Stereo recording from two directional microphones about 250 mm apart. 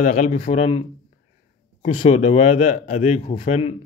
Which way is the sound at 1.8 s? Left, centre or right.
Left.